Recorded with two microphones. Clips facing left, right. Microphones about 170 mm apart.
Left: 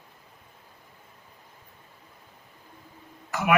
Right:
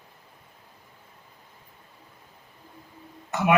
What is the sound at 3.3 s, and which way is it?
Speech, 25° right (ahead or behind).